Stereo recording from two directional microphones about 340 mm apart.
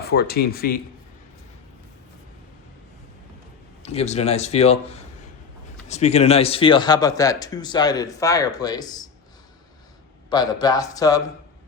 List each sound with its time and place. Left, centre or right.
0.0 s speech: left
3.8 s speech: centre
10.2 s speech: centre